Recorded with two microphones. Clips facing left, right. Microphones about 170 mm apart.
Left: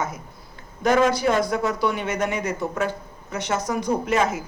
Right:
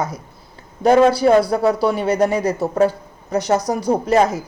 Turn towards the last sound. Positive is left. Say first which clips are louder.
# right 6 dB
turn(degrees=-35)  # may be behind; listen again after turning